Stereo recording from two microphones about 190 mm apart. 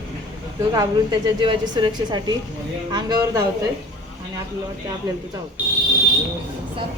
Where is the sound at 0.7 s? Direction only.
20° right (ahead or behind).